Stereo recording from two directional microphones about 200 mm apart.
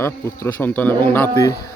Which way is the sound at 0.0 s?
15° left (ahead or behind).